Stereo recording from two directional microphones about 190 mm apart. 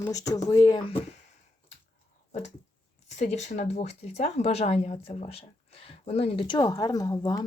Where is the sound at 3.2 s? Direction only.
35° left (ahead or behind).